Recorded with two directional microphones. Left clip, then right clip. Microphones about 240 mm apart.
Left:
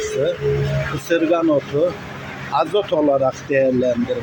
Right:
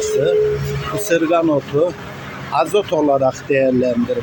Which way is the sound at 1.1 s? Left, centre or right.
Centre.